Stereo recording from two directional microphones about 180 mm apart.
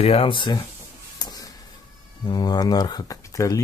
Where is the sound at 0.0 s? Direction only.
30° left (ahead or behind).